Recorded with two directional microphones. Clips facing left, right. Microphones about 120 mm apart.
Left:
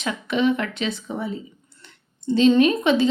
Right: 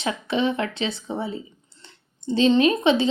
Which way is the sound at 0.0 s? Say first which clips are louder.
Left 2 dB; 30° right (ahead or behind).